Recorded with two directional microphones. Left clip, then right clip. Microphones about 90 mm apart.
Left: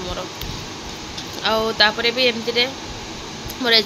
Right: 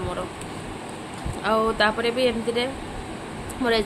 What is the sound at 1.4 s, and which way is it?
Speech, 20° right (ahead or behind).